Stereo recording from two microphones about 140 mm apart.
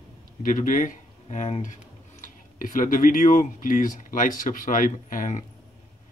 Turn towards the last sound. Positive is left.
turn(degrees=70)  # may be behind; listen again after turning